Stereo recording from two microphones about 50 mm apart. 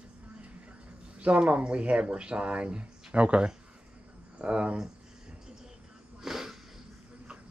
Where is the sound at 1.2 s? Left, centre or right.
Right.